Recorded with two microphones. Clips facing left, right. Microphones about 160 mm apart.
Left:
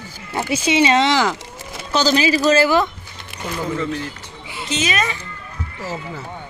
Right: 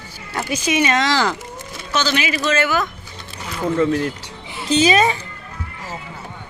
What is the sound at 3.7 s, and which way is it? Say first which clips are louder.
Speech: right 6 dB; 60° right (ahead or behind).